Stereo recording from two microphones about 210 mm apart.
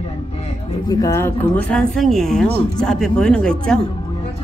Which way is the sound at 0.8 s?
15° left (ahead or behind).